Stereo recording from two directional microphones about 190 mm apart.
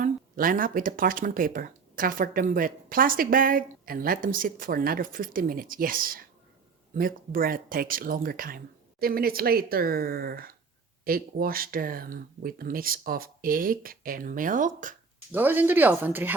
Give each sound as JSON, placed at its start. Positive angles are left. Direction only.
{"t": 0.0, "sound": "speech", "side_deg": -45}
{"t": 15.3, "sound": "speech", "side_deg": -10}